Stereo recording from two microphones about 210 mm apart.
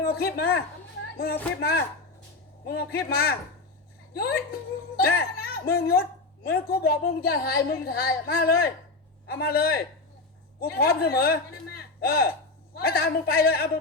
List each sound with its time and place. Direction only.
0.0 s speech: 50° left (ahead or behind)